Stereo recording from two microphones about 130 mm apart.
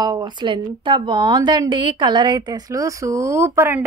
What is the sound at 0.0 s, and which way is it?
A woman's voice, 35° right (ahead or behind).